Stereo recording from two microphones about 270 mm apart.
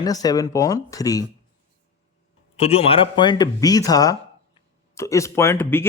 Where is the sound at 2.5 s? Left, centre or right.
Left.